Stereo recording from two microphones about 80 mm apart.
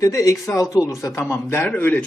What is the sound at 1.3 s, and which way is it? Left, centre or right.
Speech, left.